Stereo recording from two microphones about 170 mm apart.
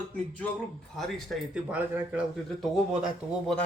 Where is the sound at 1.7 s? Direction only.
10° right (ahead or behind).